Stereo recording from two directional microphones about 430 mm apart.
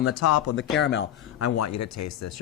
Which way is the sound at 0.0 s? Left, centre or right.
Left.